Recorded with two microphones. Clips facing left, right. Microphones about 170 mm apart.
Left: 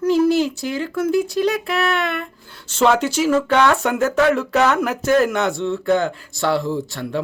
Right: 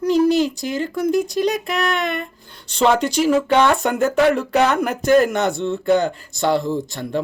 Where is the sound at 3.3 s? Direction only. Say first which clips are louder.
Even; 15° right (ahead or behind).